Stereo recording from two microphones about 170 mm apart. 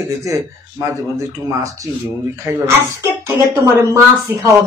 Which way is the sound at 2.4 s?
15° right (ahead or behind).